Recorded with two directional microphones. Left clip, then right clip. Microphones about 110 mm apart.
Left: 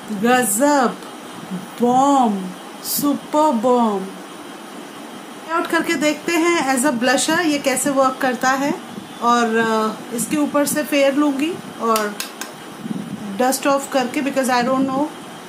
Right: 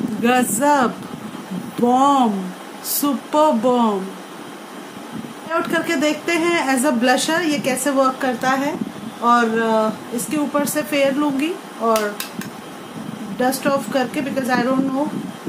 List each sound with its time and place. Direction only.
0.2 s speech: 5° left (ahead or behind)
1.9 s speech: 5° left (ahead or behind)
5.5 s a man's voice: 15° left (ahead or behind)
13.4 s a woman's voice: 20° left (ahead or behind)